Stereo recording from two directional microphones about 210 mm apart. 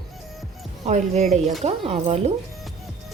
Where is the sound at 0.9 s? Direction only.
30° right (ahead or behind).